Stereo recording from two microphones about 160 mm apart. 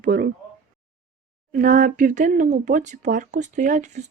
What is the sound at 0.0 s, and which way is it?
Speech, 65° right (ahead or behind).